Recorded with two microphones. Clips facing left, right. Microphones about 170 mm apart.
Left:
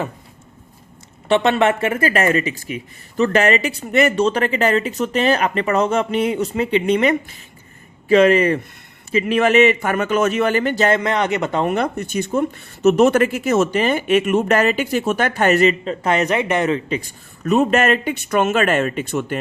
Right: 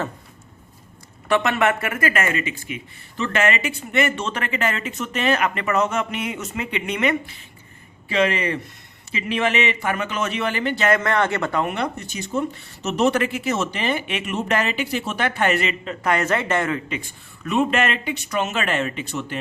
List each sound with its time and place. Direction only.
1.3 s speech: 30° left (ahead or behind); by 10.8 s 45° left (ahead or behind)
10.8 s a man's voice: 20° left (ahead or behind)
11.6 s speech: 45° left (ahead or behind)
16.1 s speech: 15° left (ahead or behind)
16.9 s speech: 40° left (ahead or behind)